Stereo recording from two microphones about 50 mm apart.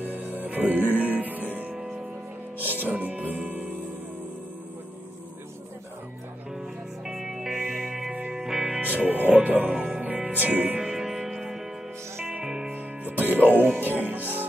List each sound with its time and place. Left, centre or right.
0.0 s music: right
2.8 s music: right
7.1 s music: centre
8.8 s music: right
10.8 s music: centre
13.0 s music: right